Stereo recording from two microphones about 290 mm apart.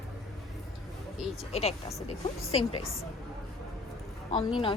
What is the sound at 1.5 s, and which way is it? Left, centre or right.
Speech, left.